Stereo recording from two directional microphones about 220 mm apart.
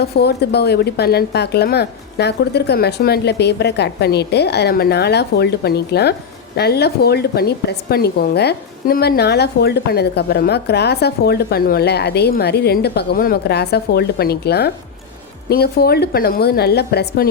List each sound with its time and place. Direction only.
0.0 s a woman's voice: 45° left (ahead or behind)